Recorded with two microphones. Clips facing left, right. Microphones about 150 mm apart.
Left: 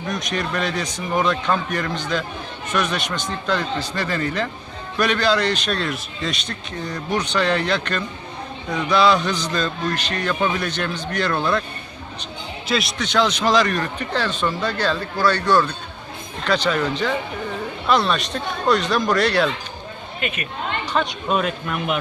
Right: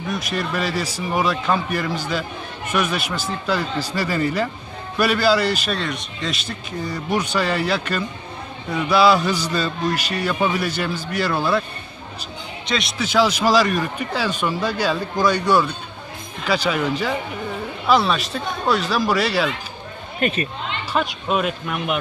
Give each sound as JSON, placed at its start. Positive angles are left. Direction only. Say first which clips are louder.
{"t": 0.1, "sound": "speech", "louder": "even", "side_deg": -5}
{"t": 12.6, "sound": "speech", "louder": "left 1 dB", "side_deg": 0}
{"t": 20.2, "sound": "speech", "louder": "right 6 dB", "side_deg": -40}
{"t": 20.9, "sound": "speech", "louder": "right 1 dB", "side_deg": -5}